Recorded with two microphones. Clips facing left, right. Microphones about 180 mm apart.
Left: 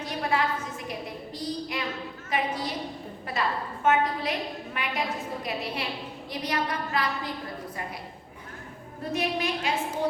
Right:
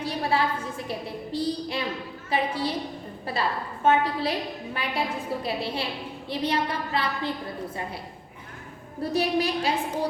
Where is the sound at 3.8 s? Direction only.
30° right (ahead or behind).